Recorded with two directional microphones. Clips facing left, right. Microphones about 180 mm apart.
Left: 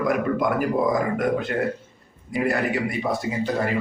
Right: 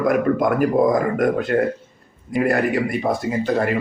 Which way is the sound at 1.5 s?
55° right (ahead or behind).